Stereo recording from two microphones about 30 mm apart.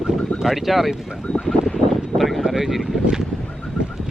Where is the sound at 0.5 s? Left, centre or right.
Centre.